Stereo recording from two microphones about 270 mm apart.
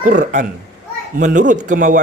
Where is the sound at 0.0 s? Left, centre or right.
Right.